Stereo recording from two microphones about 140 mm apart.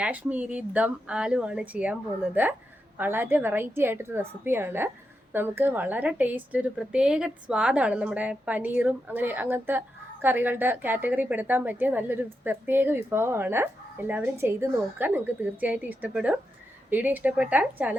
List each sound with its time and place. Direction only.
0.0 s a woman's voice: 10° right (ahead or behind)